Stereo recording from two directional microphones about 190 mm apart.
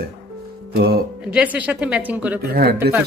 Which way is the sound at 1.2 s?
5° right (ahead or behind).